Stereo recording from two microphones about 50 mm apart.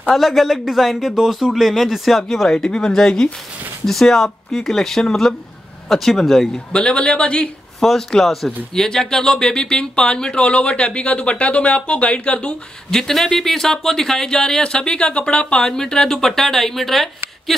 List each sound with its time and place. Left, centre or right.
0.1 s a man's voice: centre
6.7 s speech: centre
7.8 s a man's voice: centre; by 12.5 s left
12.9 s speech: centre